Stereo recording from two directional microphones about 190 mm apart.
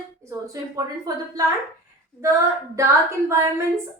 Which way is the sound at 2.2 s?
15° right (ahead or behind).